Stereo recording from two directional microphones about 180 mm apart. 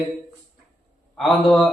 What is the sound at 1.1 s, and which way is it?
Speech, centre (ahead or behind).